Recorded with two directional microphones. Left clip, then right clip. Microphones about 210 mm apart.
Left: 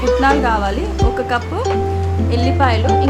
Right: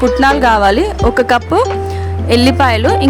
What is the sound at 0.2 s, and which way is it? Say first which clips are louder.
Speech: right 5 dB; 40° right (ahead or behind).